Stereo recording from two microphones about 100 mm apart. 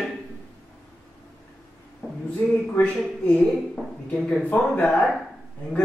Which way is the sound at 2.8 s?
15° left (ahead or behind).